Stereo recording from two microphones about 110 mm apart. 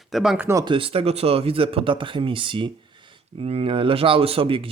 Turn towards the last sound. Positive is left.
turn(degrees=-55)  # may be behind; listen again after turning